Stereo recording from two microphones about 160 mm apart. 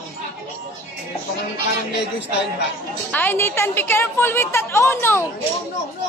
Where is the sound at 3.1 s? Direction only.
10° left (ahead or behind).